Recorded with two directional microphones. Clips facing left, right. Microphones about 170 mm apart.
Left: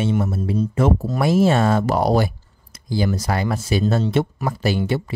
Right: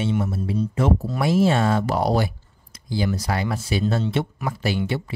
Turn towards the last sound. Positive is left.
turn(degrees=40)  # may be behind; listen again after turning